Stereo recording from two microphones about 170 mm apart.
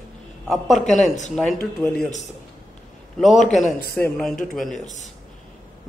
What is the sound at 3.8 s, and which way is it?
Speech, 65° left (ahead or behind).